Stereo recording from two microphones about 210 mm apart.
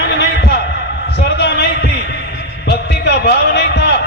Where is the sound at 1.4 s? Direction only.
50° left (ahead or behind).